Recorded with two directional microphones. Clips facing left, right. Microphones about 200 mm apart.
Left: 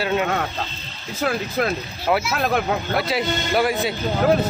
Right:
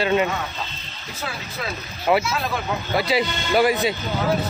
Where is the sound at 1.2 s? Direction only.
55° left (ahead or behind).